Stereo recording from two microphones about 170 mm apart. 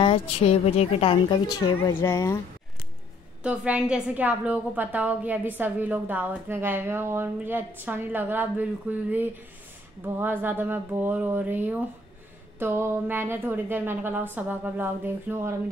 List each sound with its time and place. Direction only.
0.0 s a woman's voice: 35° left (ahead or behind); by 2.4 s 15° left (ahead or behind)
3.4 s a woman's voice: 5° right (ahead or behind)